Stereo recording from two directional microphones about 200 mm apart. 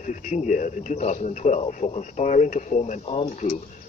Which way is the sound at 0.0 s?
40° left (ahead or behind).